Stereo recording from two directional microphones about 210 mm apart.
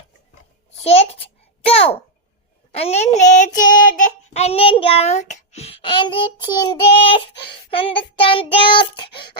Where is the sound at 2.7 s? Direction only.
30° left (ahead or behind).